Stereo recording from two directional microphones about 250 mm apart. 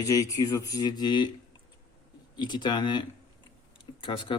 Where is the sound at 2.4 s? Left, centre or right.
Centre.